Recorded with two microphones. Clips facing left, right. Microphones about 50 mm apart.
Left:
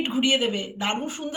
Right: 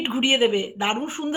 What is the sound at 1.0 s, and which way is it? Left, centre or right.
Speech, right.